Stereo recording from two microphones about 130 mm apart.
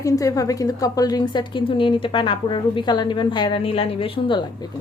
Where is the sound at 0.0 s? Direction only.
25° left (ahead or behind).